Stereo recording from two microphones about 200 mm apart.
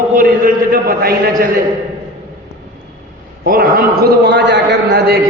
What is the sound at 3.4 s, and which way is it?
A man's voice, 50° right (ahead or behind).